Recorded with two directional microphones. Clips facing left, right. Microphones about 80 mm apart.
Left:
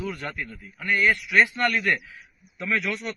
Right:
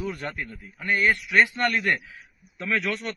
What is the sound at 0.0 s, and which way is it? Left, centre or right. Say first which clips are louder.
A man's voice: even; right.